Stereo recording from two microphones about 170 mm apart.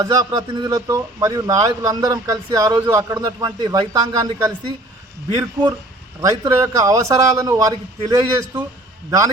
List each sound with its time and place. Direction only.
0.0 s a man's voice: 20° right (ahead or behind)